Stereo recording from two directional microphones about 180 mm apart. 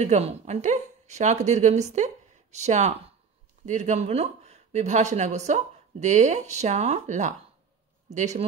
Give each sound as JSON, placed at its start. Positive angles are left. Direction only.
{"t": 0.0, "sound": "speech", "side_deg": -40}